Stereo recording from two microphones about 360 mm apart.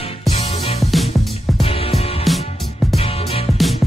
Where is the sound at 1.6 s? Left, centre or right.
Centre.